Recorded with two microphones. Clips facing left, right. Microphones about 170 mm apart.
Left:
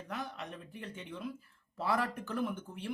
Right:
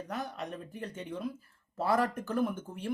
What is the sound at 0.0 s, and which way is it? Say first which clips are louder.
Speech: right 4 dB; 40° right (ahead or behind).